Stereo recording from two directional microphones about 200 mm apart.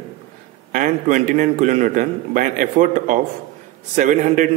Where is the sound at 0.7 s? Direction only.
40° right (ahead or behind).